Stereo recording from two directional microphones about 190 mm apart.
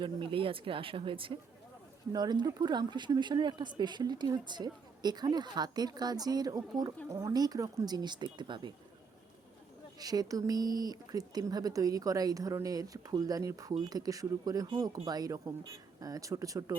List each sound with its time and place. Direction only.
0.0 s speech: 25° right (ahead or behind)
10.0 s speech: 20° right (ahead or behind)